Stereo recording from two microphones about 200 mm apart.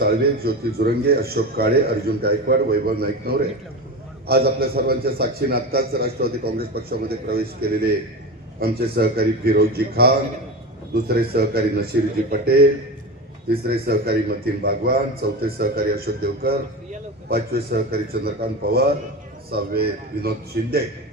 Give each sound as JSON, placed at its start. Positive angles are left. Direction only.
{"t": 0.0, "sound": "a man's voice", "side_deg": -50}
{"t": 13.7, "sound": "a man's voice", "side_deg": -50}